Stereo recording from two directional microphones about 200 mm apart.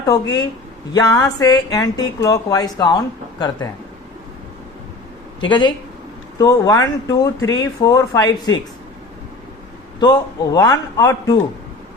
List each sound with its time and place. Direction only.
0.1 s a man's voice: 15° left (ahead or behind)
5.4 s a man's voice: 25° left (ahead or behind)
10.0 s a man's voice: 20° left (ahead or behind)